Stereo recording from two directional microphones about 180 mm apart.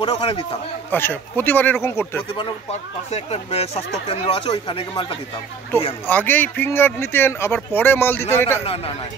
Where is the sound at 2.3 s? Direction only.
35° left (ahead or behind).